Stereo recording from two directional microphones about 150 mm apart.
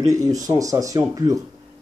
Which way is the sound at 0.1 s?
25° right (ahead or behind).